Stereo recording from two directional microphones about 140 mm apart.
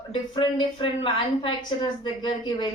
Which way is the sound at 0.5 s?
35° left (ahead or behind).